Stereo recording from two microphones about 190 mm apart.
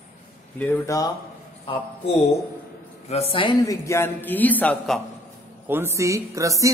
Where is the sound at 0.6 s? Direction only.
15° left (ahead or behind).